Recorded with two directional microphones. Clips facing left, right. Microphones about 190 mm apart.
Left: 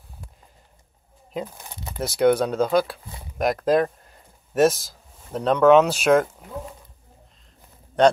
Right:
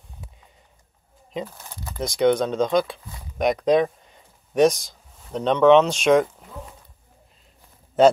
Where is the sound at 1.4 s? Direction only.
15° left (ahead or behind).